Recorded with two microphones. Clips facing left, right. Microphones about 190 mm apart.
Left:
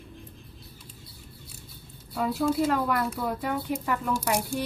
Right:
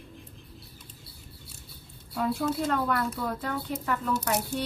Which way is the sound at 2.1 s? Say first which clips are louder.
Left 3 dB; 5° left (ahead or behind).